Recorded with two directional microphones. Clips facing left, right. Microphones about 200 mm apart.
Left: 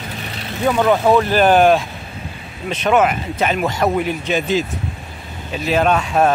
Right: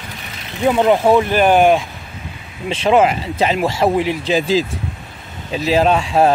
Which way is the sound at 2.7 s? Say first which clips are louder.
Right 2 dB; 30° right (ahead or behind).